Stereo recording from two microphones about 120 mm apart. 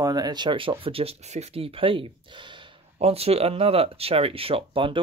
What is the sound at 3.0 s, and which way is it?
Speech, 60° right (ahead or behind).